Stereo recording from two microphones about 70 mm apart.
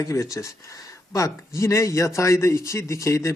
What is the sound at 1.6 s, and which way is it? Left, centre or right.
Speech, left.